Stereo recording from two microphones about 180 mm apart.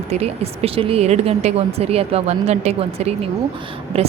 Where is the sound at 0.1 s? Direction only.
35° right (ahead or behind).